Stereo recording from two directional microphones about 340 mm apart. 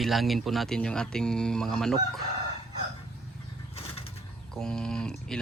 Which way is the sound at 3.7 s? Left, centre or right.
Centre.